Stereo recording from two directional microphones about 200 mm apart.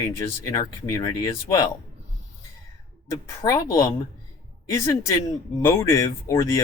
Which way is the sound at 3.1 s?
15° left (ahead or behind).